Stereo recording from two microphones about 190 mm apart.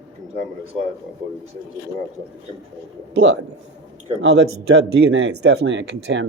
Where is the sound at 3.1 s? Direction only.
75° right (ahead or behind).